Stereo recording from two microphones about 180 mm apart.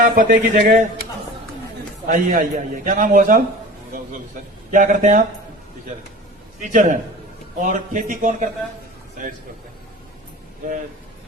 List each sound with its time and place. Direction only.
0.0 s a man's voice: 50° right (ahead or behind)
2.0 s a man's voice: 50° right (ahead or behind)
4.7 s a man's voice: 45° right (ahead or behind)
6.6 s a man's voice: 45° right (ahead or behind)